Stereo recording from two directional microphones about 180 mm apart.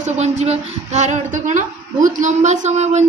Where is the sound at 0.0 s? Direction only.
40° right (ahead or behind).